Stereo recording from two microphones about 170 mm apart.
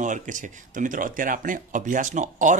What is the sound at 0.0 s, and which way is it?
Speech, 50° right (ahead or behind).